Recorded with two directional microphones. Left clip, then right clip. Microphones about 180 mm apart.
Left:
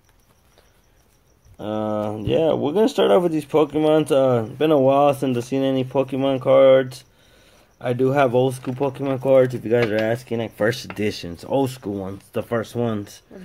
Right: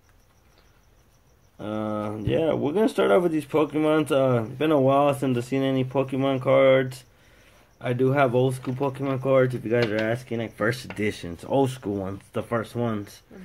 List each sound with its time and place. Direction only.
1.6 s speech: 30° left (ahead or behind); by 12.2 s 5° left (ahead or behind)
12.3 s speech: 25° left (ahead or behind)